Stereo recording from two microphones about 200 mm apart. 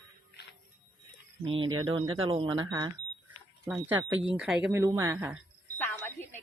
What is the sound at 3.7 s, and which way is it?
Speech, 10° right (ahead or behind).